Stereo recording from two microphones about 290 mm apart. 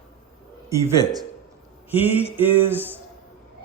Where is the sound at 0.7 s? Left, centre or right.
Centre.